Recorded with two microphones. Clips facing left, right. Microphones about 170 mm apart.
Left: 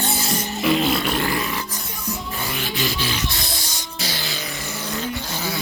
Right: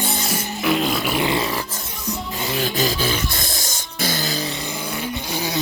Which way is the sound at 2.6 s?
40° right (ahead or behind).